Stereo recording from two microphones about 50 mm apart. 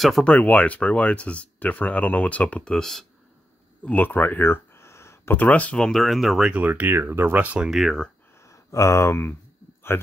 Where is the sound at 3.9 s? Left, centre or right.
Left.